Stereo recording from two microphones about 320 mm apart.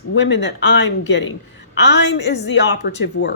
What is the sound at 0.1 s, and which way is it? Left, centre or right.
A woman's voice, left.